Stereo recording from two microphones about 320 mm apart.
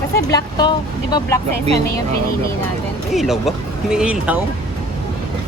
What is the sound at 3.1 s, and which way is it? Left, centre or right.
Speech, centre.